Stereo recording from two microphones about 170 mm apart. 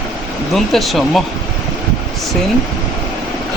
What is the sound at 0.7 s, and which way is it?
Speech, centre (ahead or behind).